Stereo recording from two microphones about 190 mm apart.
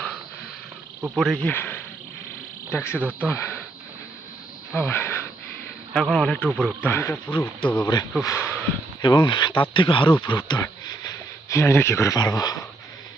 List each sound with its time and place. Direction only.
1.1 s speech: centre (ahead or behind)
2.6 s cricket: 10° left (ahead or behind)
3.2 s speech: 10° left (ahead or behind)
4.7 s a sound: 10° left (ahead or behind)
5.9 s speech: 5° left (ahead or behind)
9.0 s speech: 25° left (ahead or behind)